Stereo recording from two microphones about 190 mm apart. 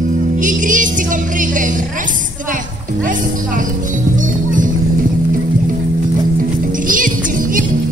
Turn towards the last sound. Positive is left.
turn(degrees=-45)  # may be behind; listen again after turning